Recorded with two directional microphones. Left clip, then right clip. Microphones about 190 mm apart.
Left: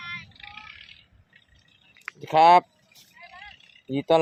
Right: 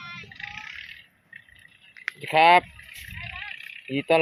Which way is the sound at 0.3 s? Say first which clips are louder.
Right 6 dB; 50° left (ahead or behind).